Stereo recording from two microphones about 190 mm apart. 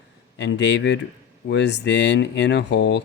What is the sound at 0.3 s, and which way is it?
Speech, 70° left (ahead or behind).